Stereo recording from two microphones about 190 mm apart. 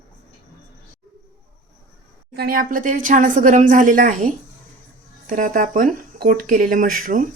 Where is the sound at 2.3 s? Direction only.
55° right (ahead or behind).